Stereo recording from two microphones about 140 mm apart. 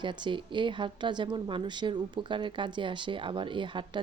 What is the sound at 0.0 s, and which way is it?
Speech, 35° right (ahead or behind).